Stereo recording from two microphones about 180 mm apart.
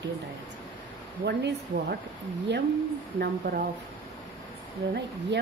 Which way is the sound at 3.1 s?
55° right (ahead or behind).